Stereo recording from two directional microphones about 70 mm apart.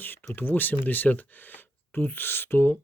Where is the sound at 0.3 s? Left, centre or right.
Left.